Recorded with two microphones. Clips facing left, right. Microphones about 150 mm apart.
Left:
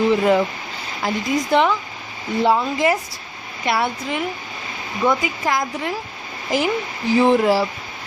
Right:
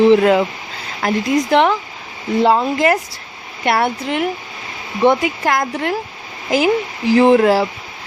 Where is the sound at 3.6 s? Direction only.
65° right (ahead or behind).